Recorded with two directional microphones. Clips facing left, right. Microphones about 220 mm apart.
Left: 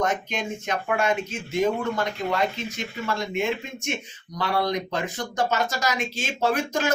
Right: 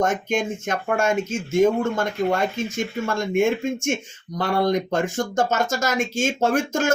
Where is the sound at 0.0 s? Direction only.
45° right (ahead or behind).